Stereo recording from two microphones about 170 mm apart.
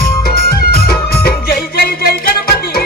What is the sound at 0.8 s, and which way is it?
Music, 65° left (ahead or behind).